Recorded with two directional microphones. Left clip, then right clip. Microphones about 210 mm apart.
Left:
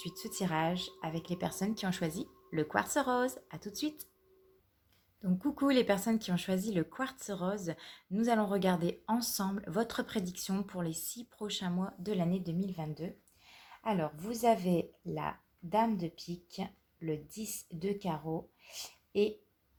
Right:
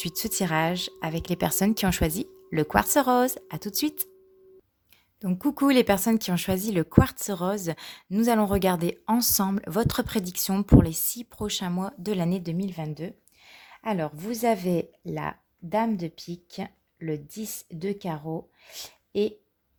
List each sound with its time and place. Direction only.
0.0 s speech: 55° right (ahead or behind)
5.2 s speech: 45° right (ahead or behind)